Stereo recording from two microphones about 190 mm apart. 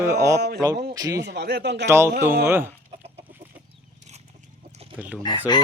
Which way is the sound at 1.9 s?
15° right (ahead or behind).